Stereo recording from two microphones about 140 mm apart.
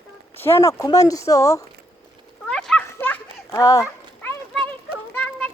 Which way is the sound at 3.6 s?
25° left (ahead or behind).